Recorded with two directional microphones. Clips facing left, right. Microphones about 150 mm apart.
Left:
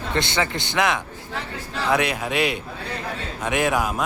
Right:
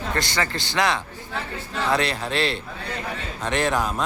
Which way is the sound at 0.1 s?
20° left (ahead or behind).